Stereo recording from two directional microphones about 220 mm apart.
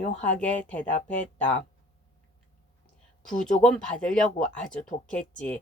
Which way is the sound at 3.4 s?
Centre (ahead or behind).